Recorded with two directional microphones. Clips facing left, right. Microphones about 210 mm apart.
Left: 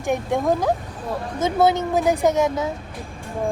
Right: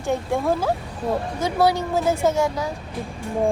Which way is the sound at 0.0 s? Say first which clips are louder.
Left 1 dB; 15° left (ahead or behind).